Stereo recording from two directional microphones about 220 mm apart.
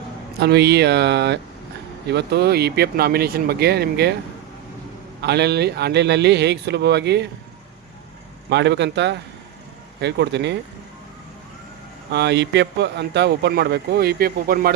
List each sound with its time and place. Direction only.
0.3 s a man's voice: 50° right (ahead or behind)
5.2 s a man's voice: 50° right (ahead or behind)
8.4 s a man's voice: 50° right (ahead or behind)
12.1 s a man's voice: 50° right (ahead or behind)